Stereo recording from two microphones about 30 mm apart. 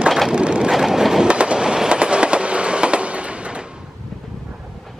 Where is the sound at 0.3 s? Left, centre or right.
Right.